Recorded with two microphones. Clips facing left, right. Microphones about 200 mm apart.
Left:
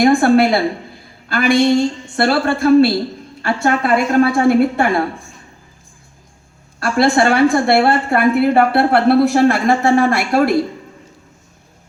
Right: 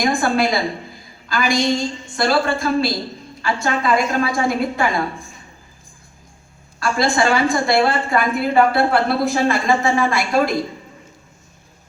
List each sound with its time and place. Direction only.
0.0 s a woman's voice: 60° left (ahead or behind)
6.7 s a woman's voice: 60° left (ahead or behind)